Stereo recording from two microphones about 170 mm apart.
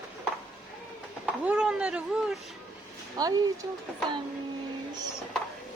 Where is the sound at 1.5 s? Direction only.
5° right (ahead or behind).